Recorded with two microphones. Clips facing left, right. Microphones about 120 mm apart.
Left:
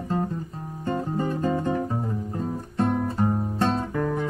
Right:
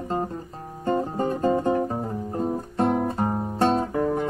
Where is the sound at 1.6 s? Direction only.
20° right (ahead or behind).